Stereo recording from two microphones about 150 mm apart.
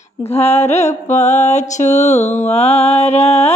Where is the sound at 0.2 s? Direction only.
45° left (ahead or behind).